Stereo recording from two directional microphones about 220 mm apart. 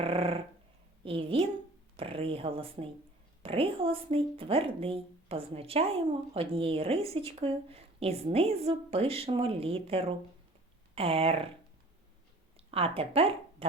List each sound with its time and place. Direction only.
0.0 s a sound: 25° right (ahead or behind)
1.0 s a woman's voice: 25° right (ahead or behind)
12.5 s speech: 25° right (ahead or behind)